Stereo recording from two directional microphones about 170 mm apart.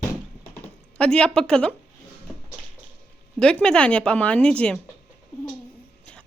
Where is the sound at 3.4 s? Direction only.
5° left (ahead or behind).